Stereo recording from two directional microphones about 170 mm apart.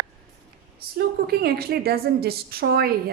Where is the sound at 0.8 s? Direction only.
65° right (ahead or behind).